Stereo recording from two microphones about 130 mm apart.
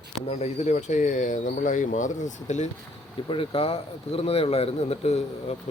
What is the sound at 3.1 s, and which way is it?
Speech, 40° left (ahead or behind).